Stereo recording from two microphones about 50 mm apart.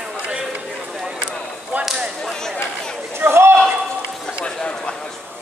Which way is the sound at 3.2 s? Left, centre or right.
Right.